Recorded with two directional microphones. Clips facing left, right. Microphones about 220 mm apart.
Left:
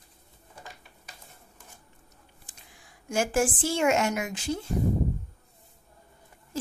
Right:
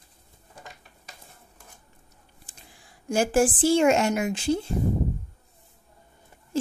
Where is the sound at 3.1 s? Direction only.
35° right (ahead or behind).